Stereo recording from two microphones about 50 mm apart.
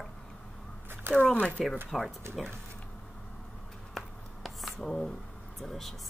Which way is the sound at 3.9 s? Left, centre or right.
Centre.